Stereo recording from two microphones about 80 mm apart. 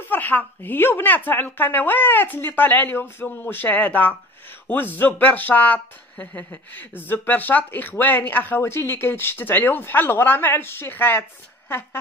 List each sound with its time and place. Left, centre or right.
0.0 s speech: left